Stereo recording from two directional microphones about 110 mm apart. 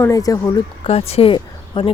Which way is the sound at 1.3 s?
55° left (ahead or behind).